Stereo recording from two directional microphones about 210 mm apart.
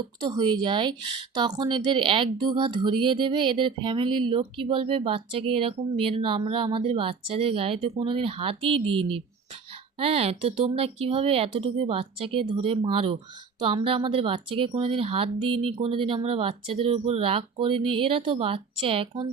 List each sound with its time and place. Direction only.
0.0 s speech: 20° right (ahead or behind)